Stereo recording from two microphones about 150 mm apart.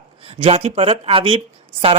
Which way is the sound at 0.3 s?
40° right (ahead or behind).